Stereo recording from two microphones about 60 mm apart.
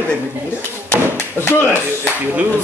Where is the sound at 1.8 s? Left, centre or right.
Right.